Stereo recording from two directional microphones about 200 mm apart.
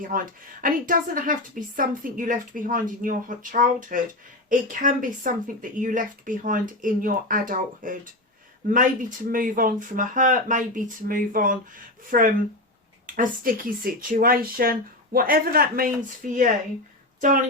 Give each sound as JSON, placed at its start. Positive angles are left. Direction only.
{"t": 0.1, "sound": "a woman's voice", "side_deg": -45}